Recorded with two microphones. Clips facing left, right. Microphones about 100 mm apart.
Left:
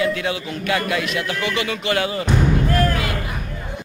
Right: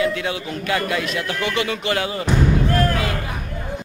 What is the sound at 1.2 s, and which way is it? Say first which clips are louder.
Speech: even; 10° left (ahead or behind).